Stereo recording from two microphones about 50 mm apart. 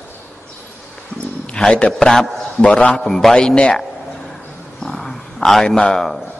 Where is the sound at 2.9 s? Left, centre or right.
Centre.